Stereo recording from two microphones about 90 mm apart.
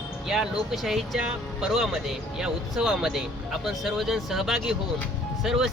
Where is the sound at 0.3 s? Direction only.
5° right (ahead or behind).